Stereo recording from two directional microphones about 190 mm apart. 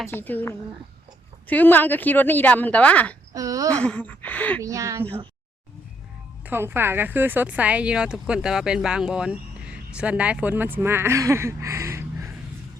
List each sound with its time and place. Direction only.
0.1 s speech: 10° left (ahead or behind)
3.3 s speech: 20° right (ahead or behind)
3.7 s speech: 5° left (ahead or behind)
4.6 s speech: 15° right (ahead or behind)
6.4 s speech: 10° right (ahead or behind)